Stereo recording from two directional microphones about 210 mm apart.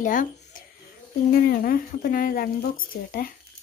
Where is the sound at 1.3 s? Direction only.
45° left (ahead or behind).